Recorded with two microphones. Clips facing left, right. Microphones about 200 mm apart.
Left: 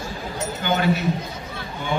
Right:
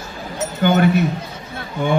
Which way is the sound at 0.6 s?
55° right (ahead or behind).